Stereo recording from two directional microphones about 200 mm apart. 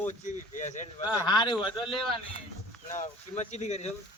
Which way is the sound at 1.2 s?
20° left (ahead or behind).